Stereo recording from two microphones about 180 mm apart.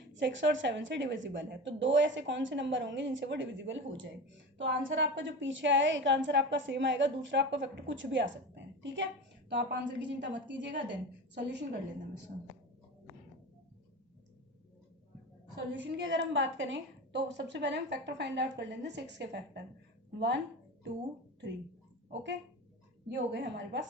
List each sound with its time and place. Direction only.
0.1 s a woman's voice: 85° right
9.5 s a woman's voice: 75° right (ahead or behind)
15.8 s a woman's voice: 90° right; by 20.4 s 75° right (ahead or behind)
22.1 s a woman's voice: 75° right (ahead or behind)